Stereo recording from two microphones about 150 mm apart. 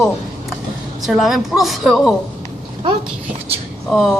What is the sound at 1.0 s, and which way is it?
Speech, centre (ahead or behind).